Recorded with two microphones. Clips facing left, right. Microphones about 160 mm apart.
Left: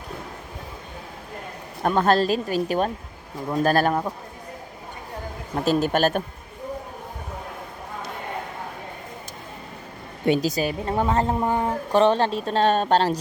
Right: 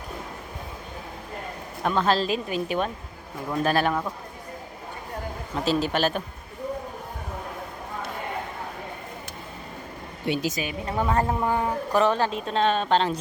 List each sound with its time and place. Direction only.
1.8 s a woman's voice: 45° left (ahead or behind)
5.6 s a woman's voice: 50° left (ahead or behind)
10.3 s a woman's voice: 35° left (ahead or behind)
10.9 s a woman's voice: 25° left (ahead or behind); by 13.1 s 40° left (ahead or behind)